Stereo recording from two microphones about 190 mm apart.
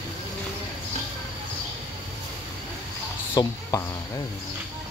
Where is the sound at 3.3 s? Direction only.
20° left (ahead or behind).